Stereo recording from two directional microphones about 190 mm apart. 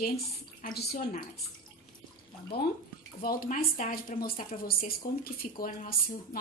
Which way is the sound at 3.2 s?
50° left (ahead or behind).